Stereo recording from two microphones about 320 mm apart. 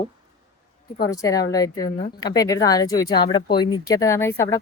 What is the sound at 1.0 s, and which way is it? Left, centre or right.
A woman's voice, centre.